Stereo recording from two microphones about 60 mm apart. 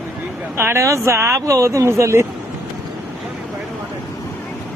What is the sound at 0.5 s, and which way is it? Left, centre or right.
Speech, right.